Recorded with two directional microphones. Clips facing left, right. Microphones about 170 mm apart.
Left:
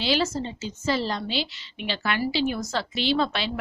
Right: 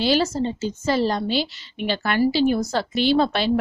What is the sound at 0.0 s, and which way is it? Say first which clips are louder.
A woman's voice: right 5 dB; 40° right (ahead or behind).